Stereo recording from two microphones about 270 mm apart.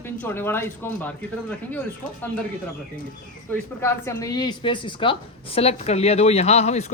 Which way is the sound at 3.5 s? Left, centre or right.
Centre.